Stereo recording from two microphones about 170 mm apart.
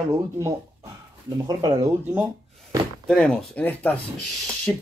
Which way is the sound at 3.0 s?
5° left (ahead or behind).